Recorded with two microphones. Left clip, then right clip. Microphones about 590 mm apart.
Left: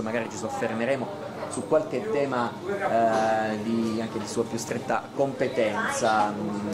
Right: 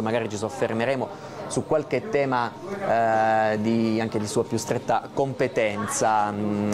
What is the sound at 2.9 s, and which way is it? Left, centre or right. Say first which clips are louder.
Speech: right 3 dB; right.